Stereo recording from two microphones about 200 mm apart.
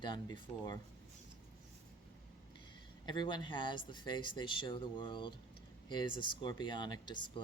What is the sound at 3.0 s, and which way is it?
Speech, 20° left (ahead or behind).